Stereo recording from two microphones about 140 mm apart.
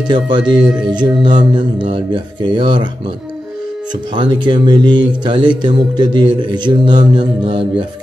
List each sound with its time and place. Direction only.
0.5 s speech: 35° right (ahead or behind)
4.1 s speech: 35° right (ahead or behind)